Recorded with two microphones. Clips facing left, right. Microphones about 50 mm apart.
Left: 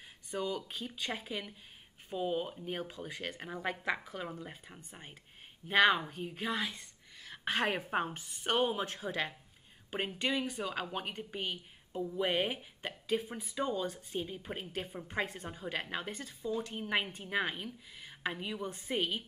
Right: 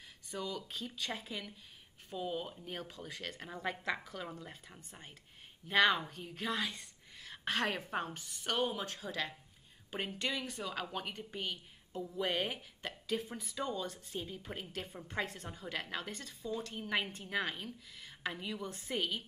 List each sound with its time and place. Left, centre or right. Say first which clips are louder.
0.3 s a woman's voice: left 4 dB; left; by 7.3 s centre
7.4 s a woman's voice: left 2 dB; centre